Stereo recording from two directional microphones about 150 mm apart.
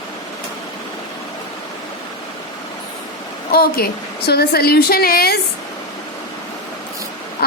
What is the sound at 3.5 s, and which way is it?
A woman's voice, 90° left.